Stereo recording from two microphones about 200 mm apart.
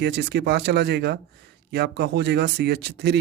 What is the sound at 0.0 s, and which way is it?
Speech, 55° right (ahead or behind).